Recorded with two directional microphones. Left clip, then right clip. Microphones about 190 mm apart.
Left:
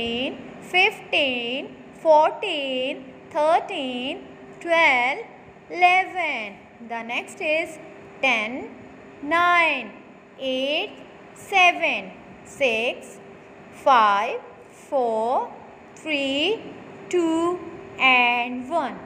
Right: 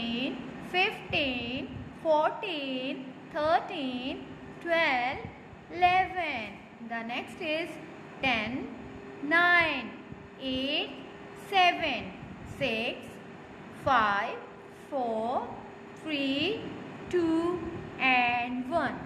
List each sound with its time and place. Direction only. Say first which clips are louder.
0.0 s a woman's voice: left 7 dB; 25° left (ahead or behind)